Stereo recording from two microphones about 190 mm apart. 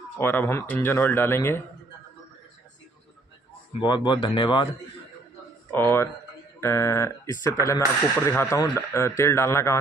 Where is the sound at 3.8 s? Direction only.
25° left (ahead or behind).